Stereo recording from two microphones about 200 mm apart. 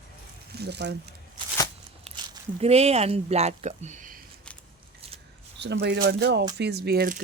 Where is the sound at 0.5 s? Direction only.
55° right (ahead or behind).